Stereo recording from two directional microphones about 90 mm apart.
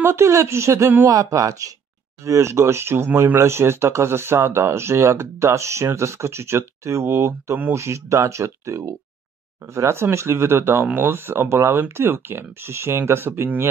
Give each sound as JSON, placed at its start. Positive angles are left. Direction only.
{"t": 0.0, "sound": "speech", "side_deg": -30}